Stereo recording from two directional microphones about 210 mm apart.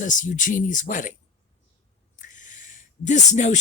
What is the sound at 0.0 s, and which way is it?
Speech, 35° left (ahead or behind).